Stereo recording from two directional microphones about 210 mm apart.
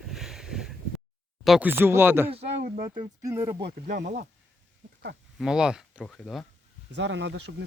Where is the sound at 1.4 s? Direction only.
5° right (ahead or behind).